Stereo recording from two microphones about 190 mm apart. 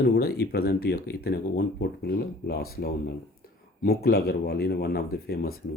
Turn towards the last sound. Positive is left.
turn(degrees=55)  # may be behind; listen again after turning